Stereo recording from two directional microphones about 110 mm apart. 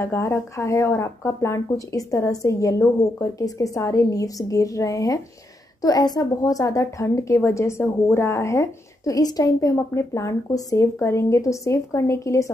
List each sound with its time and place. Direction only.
0.0 s speech: 25° left (ahead or behind)